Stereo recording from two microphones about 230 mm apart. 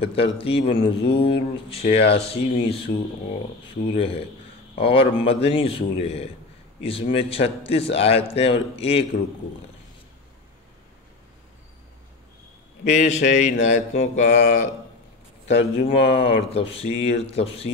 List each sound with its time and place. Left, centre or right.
0.0 s a man's voice: left
3.9 s a man's voice: left
12.8 s a man's voice: left